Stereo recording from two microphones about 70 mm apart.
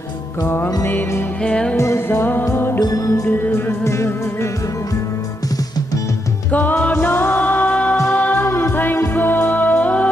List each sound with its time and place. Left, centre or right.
1.4 s music: centre
1.8 s music: left
2.0 s music: left
2.8 s music: left
3.3 s music: left
6.5 s music: left
8.5 s music: left